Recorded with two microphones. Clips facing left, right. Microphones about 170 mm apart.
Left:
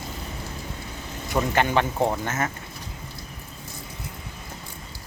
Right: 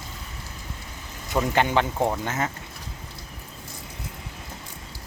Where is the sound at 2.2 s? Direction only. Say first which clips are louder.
Even; 15° right (ahead or behind).